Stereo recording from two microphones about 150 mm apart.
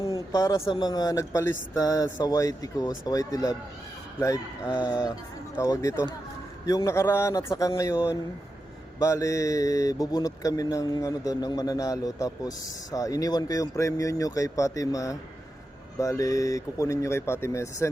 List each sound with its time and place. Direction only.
0.0 s a man's voice: 25° left (ahead or behind)
0.7 s mantra: 30° left (ahead or behind)
4.6 s speech: 10° right (ahead or behind)
5.5 s mantra: 20° left (ahead or behind)
9.0 s mantra: 20° left (ahead or behind)